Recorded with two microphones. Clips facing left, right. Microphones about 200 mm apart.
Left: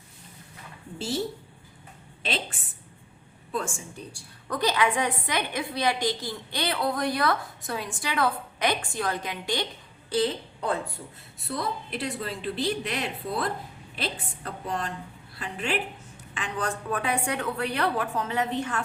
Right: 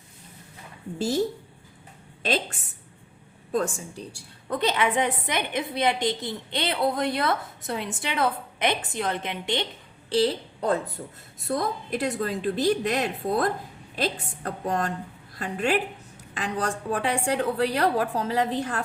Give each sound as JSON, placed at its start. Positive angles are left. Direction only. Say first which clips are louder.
{"t": 0.9, "sound": "a woman's voice", "louder": "right 5 dB", "side_deg": -40}
{"t": 2.2, "sound": "a woman's voice", "louder": "right 5 dB", "side_deg": -40}
{"t": 4.4, "sound": "a woman's voice", "louder": "right 1 dB", "side_deg": -25}